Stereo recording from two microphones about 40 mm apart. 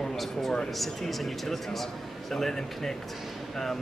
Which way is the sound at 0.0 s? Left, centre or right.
Centre.